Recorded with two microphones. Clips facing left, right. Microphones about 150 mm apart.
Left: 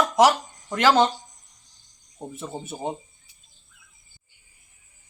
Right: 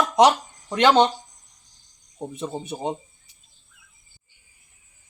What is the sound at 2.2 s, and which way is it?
Speech, 20° right (ahead or behind).